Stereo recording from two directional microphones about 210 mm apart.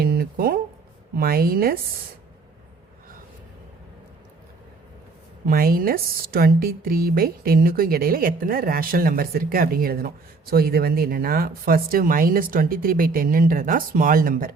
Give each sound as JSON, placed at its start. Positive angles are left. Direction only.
{"t": 0.0, "sound": "a sound", "side_deg": -45}
{"t": 1.1, "sound": "speech", "side_deg": -45}
{"t": 5.5, "sound": "speech", "side_deg": -45}